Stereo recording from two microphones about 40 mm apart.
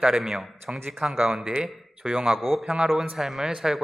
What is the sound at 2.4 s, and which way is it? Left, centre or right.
Speech, centre.